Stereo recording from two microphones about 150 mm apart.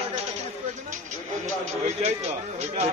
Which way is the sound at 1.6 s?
50° right (ahead or behind).